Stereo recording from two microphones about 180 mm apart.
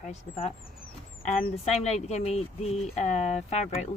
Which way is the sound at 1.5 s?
35° left (ahead or behind).